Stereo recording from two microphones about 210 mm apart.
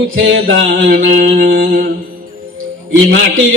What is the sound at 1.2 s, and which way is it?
Mantra, 55° right (ahead or behind).